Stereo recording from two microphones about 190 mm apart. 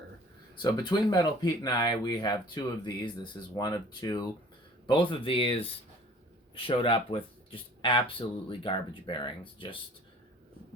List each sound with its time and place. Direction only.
0.5 s speech: 25° left (ahead or behind)